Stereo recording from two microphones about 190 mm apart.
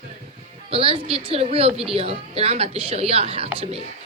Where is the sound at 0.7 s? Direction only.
30° right (ahead or behind).